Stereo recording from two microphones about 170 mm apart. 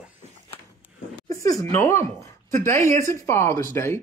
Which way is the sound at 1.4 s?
20° left (ahead or behind).